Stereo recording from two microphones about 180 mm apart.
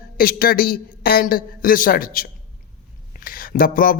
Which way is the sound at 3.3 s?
55° left (ahead or behind).